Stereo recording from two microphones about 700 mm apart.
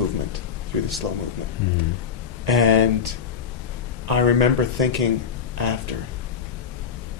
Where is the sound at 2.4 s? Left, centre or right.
Right.